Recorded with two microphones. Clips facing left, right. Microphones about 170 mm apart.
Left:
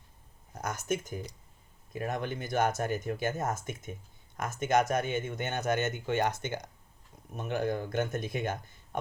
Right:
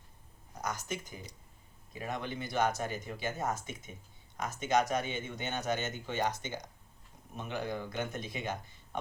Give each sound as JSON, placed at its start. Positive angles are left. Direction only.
{"t": 0.6, "sound": "speech", "side_deg": 50}